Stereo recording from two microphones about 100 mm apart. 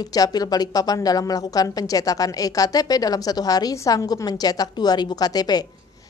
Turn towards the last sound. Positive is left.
turn(degrees=40)  # may be behind; listen again after turning